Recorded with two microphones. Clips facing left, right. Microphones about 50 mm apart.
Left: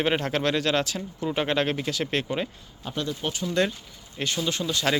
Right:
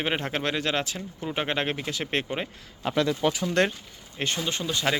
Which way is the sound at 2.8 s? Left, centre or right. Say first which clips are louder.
Right 7 dB; right.